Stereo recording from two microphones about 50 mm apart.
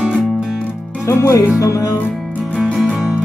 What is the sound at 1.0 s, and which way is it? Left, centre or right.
Speech, left.